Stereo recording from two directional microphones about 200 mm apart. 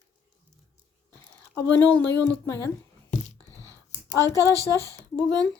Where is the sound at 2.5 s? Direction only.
15° left (ahead or behind).